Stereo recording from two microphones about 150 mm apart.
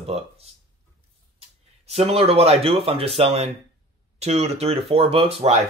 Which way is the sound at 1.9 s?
45° right (ahead or behind).